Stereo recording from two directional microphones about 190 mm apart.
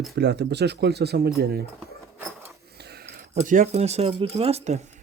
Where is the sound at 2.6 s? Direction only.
55° right (ahead or behind).